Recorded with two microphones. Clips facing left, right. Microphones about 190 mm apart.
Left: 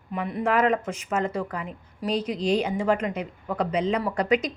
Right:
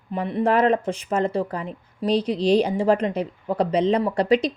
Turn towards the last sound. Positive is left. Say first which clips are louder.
# right 4 dB
turn(degrees=-30)  # may be behind; listen again after turning